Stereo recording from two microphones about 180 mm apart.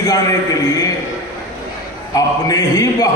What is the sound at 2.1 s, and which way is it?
Speech, 20° left (ahead or behind).